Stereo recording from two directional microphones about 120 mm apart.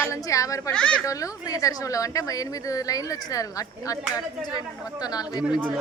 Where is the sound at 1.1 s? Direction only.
30° left (ahead or behind).